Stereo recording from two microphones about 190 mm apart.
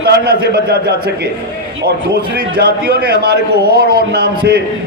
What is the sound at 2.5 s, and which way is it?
A man's voice, 55° right (ahead or behind).